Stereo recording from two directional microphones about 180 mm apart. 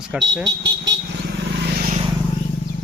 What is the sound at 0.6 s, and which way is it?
Vehicle, 75° right (ahead or behind).